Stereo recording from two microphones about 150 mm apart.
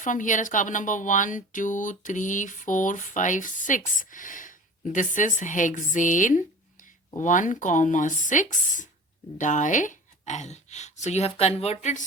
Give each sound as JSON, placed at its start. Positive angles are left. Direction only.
{"t": 0.0, "sound": "speech", "side_deg": 60}